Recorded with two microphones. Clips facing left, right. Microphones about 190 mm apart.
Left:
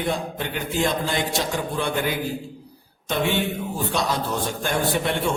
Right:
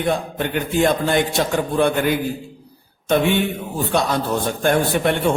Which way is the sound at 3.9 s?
55° right (ahead or behind).